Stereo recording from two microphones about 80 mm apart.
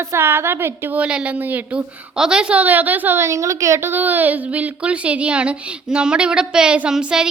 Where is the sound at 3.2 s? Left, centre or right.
Right.